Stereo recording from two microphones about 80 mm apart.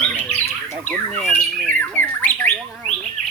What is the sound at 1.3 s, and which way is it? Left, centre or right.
Squawk, left.